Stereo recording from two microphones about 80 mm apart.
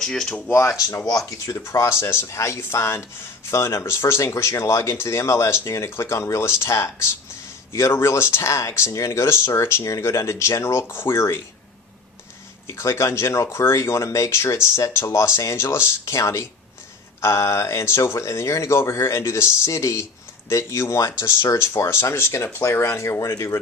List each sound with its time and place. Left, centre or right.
0.0 s speech: centre
0.8 s speech: left
12.6 s speech: left